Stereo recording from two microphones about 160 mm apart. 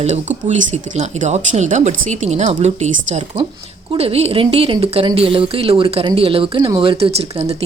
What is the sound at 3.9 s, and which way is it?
Speech, 40° right (ahead or behind).